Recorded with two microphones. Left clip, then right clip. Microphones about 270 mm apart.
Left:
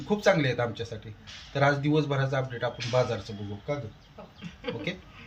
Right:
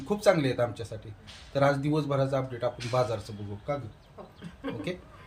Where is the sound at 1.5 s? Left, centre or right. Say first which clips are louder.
Left 1 dB; centre.